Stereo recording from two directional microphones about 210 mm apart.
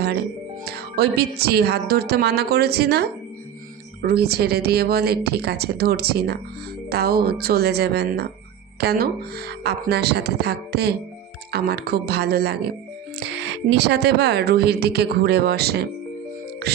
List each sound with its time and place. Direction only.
0.6 s speech: 50° right (ahead or behind)